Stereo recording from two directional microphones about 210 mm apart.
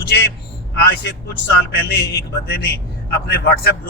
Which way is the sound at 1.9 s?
50° left (ahead or behind).